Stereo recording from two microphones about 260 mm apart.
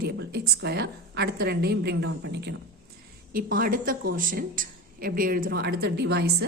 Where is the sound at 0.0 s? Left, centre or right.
Right.